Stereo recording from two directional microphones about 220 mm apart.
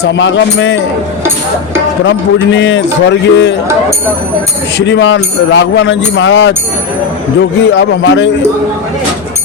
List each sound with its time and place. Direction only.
0.0 s speech: 55° left (ahead or behind)
2.0 s a man's voice: 55° left (ahead or behind)
4.9 s speech: 55° left (ahead or behind)
7.6 s speech: 55° left (ahead or behind)